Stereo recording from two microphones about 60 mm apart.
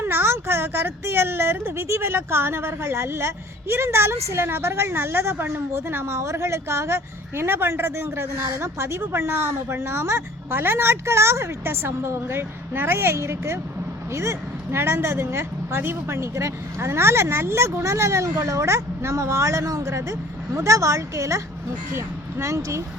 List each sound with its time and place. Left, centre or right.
0.0 s speech: right